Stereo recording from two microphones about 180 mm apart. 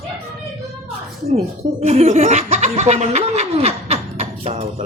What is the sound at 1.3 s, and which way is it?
Speech, 45° right (ahead or behind).